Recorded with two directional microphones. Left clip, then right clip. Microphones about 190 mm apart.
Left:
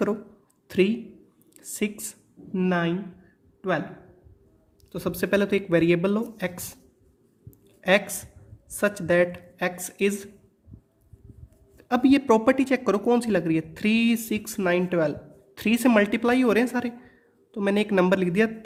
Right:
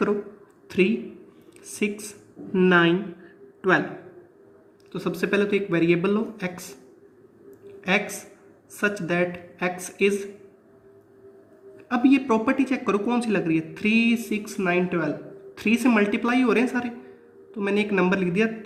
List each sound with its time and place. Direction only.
1.8 s a man's voice: 45° left (ahead or behind)
2.5 s a woman's voice: 25° left (ahead or behind)
4.9 s a man's voice: 50° left (ahead or behind)
7.8 s a man's voice: 45° left (ahead or behind)
11.9 s a man's voice: 50° left (ahead or behind)